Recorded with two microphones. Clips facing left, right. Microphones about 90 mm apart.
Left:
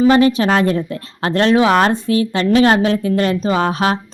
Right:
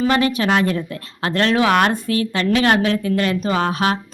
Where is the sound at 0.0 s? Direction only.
25° left (ahead or behind).